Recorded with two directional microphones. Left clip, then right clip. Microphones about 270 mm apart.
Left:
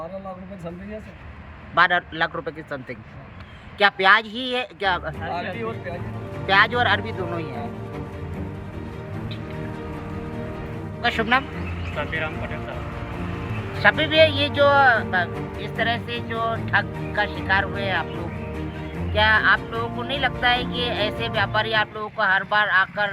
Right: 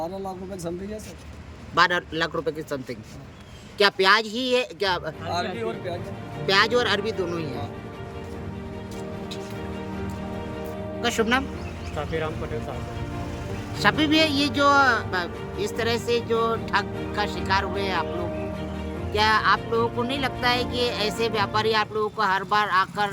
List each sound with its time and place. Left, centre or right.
1.7 s speech: centre
11.0 s speech: centre
13.7 s speech: centre
19.1 s speech: centre